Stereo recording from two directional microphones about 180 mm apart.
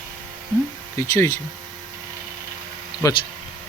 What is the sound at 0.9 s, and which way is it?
Speech, 15° left (ahead or behind).